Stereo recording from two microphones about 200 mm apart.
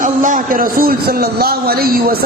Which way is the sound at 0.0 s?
40° right (ahead or behind).